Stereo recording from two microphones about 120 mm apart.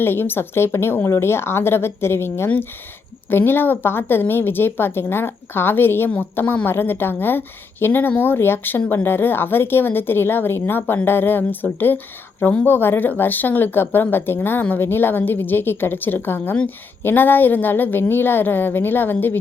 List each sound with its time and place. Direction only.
0.0 s a woman's voice: 20° left (ahead or behind)